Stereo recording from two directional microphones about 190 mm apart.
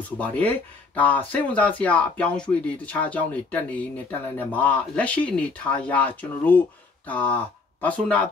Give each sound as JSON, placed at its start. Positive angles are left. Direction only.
{"t": 0.0, "sound": "speech", "side_deg": 10}